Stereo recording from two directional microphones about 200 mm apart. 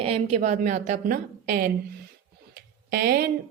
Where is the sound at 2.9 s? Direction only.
50° right (ahead or behind).